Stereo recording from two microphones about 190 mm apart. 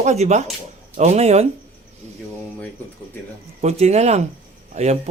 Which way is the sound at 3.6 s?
35° right (ahead or behind).